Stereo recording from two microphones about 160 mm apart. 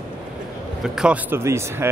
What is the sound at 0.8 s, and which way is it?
Speech, 5° right (ahead or behind).